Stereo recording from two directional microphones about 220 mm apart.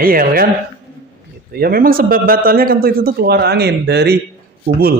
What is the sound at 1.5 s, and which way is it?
Speech, 45° right (ahead or behind).